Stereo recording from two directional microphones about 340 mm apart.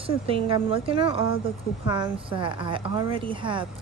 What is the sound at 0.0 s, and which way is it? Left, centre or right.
A woman's voice, centre.